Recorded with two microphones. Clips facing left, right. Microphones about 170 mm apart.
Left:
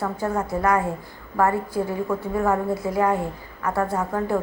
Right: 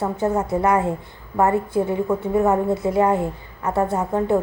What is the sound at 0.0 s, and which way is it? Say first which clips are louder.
A woman's voice: right 4 dB; 25° right (ahead or behind).